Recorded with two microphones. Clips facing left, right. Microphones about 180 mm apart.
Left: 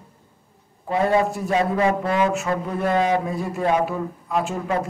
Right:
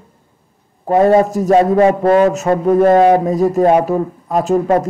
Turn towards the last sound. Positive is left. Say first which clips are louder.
# right 10 dB
turn(degrees=-45)  # may be behind; listen again after turning